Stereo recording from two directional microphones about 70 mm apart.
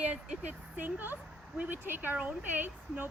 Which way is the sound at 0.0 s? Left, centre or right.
Right.